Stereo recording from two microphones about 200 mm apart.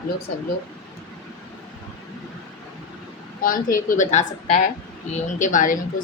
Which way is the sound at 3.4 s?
45° left (ahead or behind).